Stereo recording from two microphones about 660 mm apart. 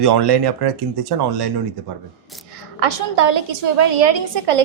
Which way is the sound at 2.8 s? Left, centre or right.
Right.